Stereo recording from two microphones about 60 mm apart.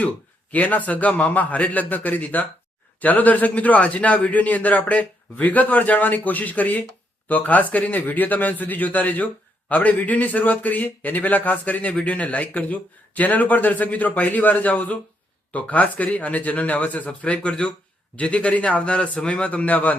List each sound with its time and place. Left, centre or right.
0.5 s a man's voice: left